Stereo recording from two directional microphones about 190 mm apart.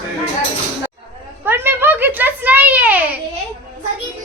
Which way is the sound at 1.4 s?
10° right (ahead or behind).